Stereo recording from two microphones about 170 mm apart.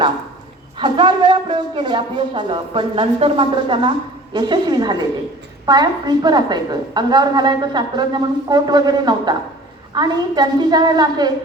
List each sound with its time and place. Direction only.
0.8 s a woman's voice: 25° right (ahead or behind)